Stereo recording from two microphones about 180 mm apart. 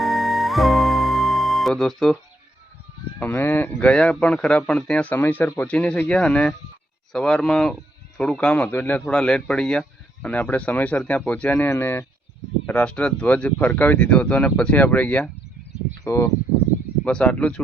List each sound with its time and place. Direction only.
0.0 s music: centre (ahead or behind)
3.2 s speech: 10° left (ahead or behind)
17.0 s speech: 5° left (ahead or behind)